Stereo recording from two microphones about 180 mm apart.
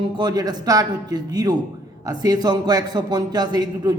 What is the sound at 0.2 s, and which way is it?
A man's voice, 25° right (ahead or behind).